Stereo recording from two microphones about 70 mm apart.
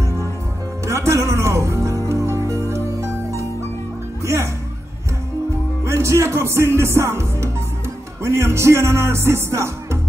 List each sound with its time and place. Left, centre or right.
0.8 s music: right
5.9 s music: right